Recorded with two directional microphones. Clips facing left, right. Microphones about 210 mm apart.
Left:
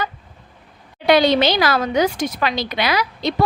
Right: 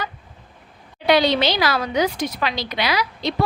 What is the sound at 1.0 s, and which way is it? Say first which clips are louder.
A woman's voice: left 3 dB; 50° left (ahead or behind).